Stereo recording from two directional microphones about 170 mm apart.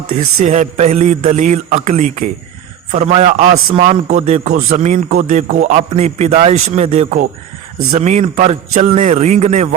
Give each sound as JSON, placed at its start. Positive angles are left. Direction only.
{"t": 0.4, "sound": "a man's voice", "side_deg": -40}